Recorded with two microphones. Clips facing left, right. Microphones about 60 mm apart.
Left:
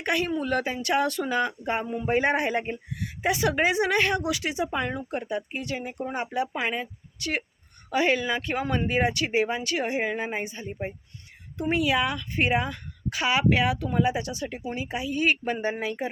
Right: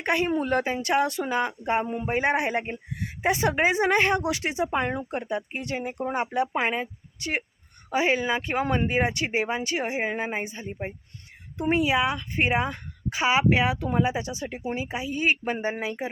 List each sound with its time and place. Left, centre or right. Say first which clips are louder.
0.0 s speech: right 2 dB; right
0.3 s a woman's voice: right 2 dB; right
2.0 s a woman's voice: left 3 dB; centre